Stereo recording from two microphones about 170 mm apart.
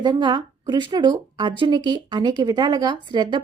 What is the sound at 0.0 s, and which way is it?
A woman's voice, 25° right (ahead or behind).